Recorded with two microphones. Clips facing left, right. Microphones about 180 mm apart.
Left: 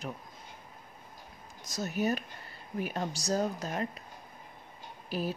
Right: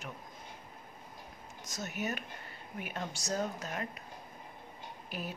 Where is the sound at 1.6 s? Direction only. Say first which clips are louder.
Left 7 dB; 35° left (ahead or behind).